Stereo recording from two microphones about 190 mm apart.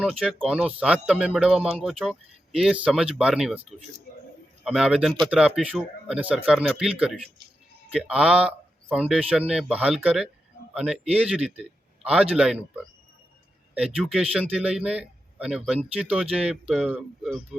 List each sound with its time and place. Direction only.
0.0 s speech: centre (ahead or behind)
10.8 s a man's voice: 30° right (ahead or behind)
11.2 s speech: 5° right (ahead or behind)
13.7 s speech: 5° right (ahead or behind)